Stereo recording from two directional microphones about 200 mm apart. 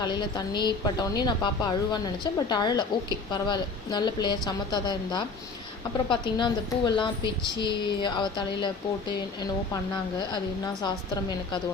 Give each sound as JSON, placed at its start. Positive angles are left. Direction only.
{"t": 0.0, "sound": "a woman's voice", "side_deg": 20}
{"t": 10.8, "sound": "a woman's voice", "side_deg": 20}